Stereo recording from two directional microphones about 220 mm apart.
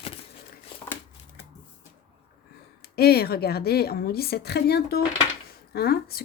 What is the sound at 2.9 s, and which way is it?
A woman's voice, 45° left (ahead or behind).